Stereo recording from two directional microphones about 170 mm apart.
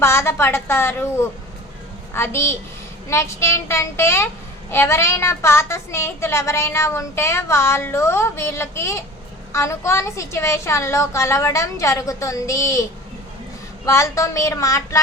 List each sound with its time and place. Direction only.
0.0 s speech: 15° left (ahead or behind)